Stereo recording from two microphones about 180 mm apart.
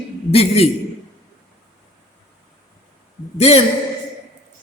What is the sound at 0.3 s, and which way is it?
Speech, 35° left (ahead or behind).